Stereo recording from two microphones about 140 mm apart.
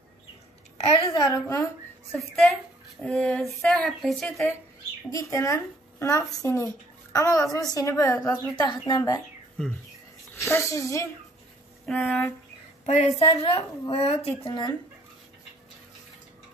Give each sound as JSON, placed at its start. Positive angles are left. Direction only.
{"t": 1.1, "sound": "speech", "side_deg": 20}
{"t": 2.1, "sound": "speech", "side_deg": 0}
{"t": 5.1, "sound": "a woman's voice", "side_deg": 25}
{"t": 10.3, "sound": "a woman's voice", "side_deg": 20}
{"t": 11.9, "sound": "speech", "side_deg": 10}
{"t": 12.8, "sound": "a woman's voice", "side_deg": 50}